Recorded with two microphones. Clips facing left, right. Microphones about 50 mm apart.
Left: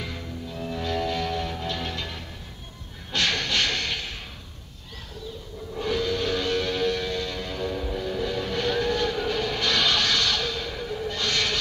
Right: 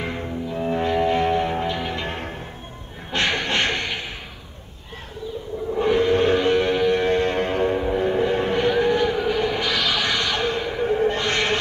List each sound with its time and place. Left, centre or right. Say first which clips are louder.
0.0 s music: right 7 dB; right
2.0 s music: right 9 dB; right
3.1 s a sound: right 3 dB; right
5.8 s music: right 8 dB; right; by 10.0 s centre
10.0 s music: right 3 dB; centre